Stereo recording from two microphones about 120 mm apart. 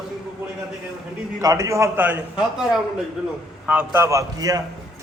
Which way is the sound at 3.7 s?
20° right (ahead or behind).